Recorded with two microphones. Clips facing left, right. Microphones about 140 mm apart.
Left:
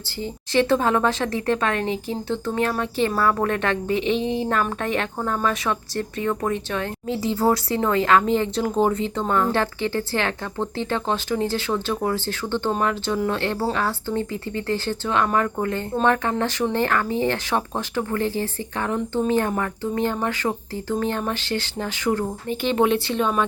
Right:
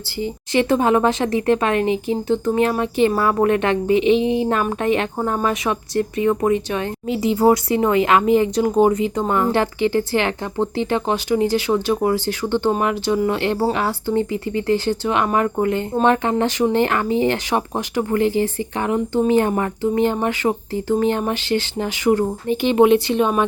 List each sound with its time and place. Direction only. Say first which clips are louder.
0.2 s speech: right 2 dB; 15° right (ahead or behind)